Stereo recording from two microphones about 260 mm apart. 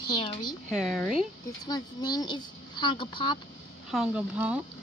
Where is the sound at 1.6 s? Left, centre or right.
Centre.